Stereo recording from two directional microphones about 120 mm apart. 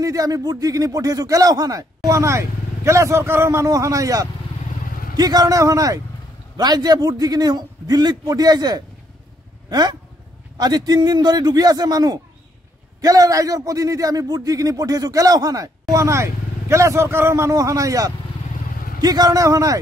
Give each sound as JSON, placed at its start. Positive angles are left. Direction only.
{"t": 0.0, "sound": "a man's voice", "side_deg": -30}